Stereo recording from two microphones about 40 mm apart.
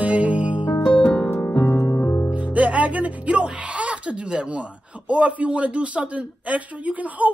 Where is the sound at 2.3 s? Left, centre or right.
Right.